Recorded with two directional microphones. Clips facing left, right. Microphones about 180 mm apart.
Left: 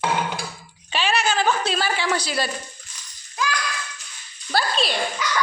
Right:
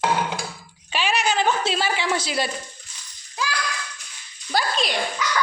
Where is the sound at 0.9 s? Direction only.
10° right (ahead or behind).